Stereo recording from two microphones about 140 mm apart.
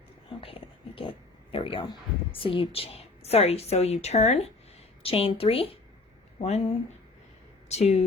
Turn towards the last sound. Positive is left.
turn(degrees=50)  # may be behind; listen again after turning